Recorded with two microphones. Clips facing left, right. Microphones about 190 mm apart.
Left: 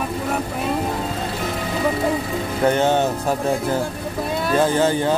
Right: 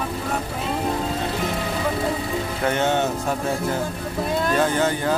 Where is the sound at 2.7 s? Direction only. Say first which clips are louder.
Left 2 dB; 35° left (ahead or behind).